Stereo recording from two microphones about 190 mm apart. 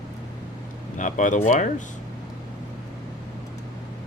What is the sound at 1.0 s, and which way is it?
Speech, 40° left (ahead or behind).